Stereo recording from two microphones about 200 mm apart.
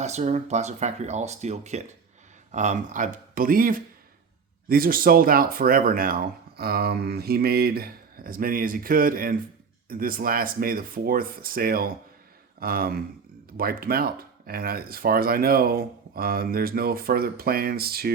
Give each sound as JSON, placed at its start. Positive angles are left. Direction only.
{"t": 0.0, "sound": "speech", "side_deg": -35}
{"t": 12.5, "sound": "a sound", "side_deg": -50}
{"t": 13.6, "sound": "speech", "side_deg": -50}